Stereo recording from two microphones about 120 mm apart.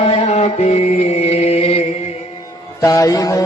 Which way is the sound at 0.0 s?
60° left (ahead or behind).